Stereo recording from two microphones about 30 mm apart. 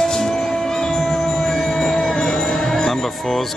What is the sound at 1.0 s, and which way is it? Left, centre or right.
Music, centre.